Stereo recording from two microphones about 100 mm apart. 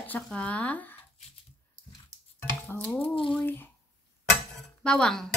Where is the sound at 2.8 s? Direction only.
15° left (ahead or behind).